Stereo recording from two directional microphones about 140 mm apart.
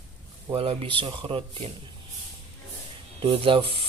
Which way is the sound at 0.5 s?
40° right (ahead or behind).